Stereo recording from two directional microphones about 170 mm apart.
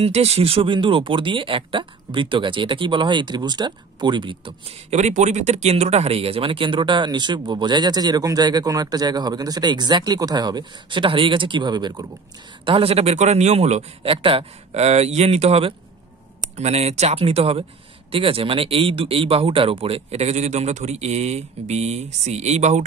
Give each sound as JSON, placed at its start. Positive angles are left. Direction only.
{"t": 0.0, "sound": "speech", "side_deg": -40}
{"t": 4.9, "sound": "speech", "side_deg": -45}